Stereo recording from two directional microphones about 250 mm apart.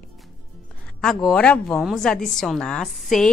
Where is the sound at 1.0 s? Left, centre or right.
Centre.